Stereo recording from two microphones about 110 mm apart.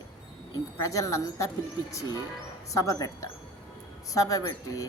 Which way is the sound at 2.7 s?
30° left (ahead or behind).